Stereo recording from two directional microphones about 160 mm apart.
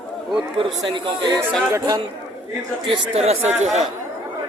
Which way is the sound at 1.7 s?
20° right (ahead or behind).